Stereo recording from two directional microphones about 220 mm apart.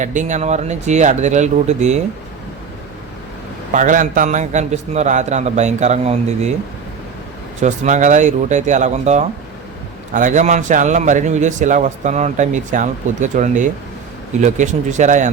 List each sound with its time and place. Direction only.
0.0 s a man's voice: 35° right (ahead or behind)
3.7 s a man's voice: 35° right (ahead or behind)
7.6 s a man's voice: 35° right (ahead or behind)